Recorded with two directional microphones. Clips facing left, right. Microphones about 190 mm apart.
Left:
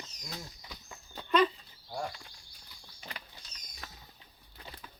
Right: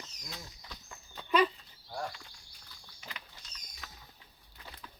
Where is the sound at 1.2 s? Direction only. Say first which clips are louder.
Left 1 dB; 5° right (ahead or behind).